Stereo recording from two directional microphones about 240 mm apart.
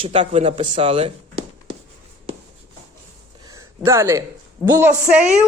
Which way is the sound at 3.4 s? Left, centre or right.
Centre.